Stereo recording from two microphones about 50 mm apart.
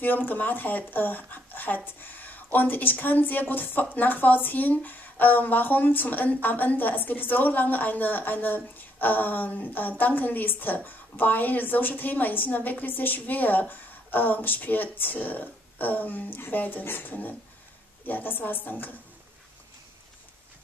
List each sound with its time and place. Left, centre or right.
0.0 s a woman's voice: left